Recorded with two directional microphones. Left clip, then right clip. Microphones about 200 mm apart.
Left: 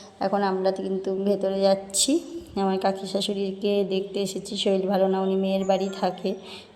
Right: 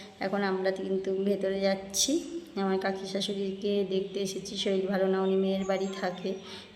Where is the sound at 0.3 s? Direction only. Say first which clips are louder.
Left 5 dB; 15° left (ahead or behind).